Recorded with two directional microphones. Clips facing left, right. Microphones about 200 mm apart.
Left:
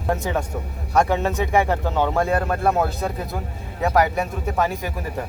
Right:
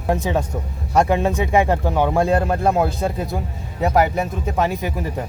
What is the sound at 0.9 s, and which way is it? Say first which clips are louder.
Speech: right 2 dB; 15° right (ahead or behind).